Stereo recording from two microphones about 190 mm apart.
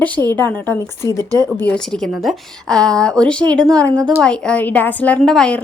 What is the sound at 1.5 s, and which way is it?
A woman's voice, 10° left (ahead or behind).